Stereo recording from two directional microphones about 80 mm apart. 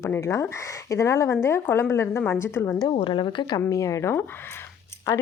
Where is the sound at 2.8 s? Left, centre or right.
Left.